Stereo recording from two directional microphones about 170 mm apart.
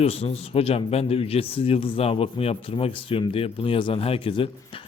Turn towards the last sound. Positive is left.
turn(degrees=30)  # may be behind; listen again after turning